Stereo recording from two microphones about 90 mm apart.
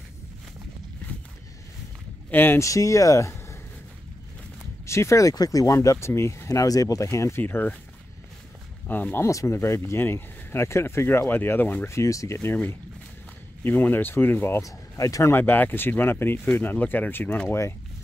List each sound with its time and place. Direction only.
2.3 s speech: 25° left (ahead or behind)
2.6 s speech: 35° left (ahead or behind)
4.8 s speech: 30° left (ahead or behind)
7.4 s speech: 20° left (ahead or behind)
8.8 s speech: 20° left (ahead or behind)
9.3 s speech: 35° left (ahead or behind)
13.7 s speech: 20° left (ahead or behind)
14.6 s speech: 40° left (ahead or behind)
15.3 s speech: 25° left (ahead or behind)